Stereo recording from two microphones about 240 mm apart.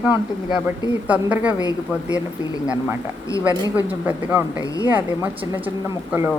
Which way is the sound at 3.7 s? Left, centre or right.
Centre.